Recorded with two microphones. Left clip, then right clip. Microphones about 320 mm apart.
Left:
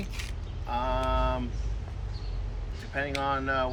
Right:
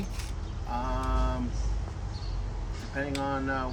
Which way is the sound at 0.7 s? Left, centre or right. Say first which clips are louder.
Left 4 dB; centre.